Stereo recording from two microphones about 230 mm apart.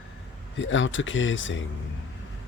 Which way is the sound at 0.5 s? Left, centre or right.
Left.